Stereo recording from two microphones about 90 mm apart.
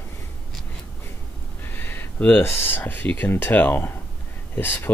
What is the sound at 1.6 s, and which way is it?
Speech, 25° left (ahead or behind).